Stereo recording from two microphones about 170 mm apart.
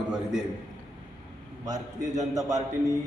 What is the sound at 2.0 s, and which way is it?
Speech, 45° right (ahead or behind).